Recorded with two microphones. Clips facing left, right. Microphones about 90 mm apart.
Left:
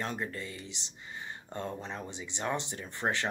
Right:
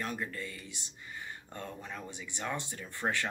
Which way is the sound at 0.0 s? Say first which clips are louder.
Left 1 dB; 25° left (ahead or behind).